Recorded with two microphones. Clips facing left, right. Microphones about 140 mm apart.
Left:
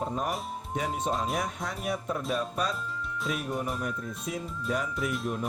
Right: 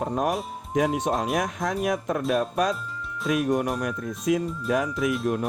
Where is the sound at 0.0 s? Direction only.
90° right.